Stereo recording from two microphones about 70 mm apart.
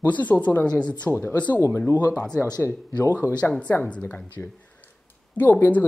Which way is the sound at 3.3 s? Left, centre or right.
Centre.